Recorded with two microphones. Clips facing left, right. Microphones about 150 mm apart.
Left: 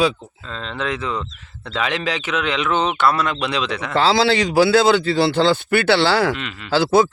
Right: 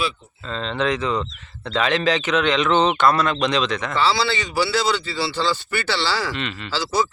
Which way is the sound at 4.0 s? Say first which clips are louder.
Left 6 dB; 45° left (ahead or behind).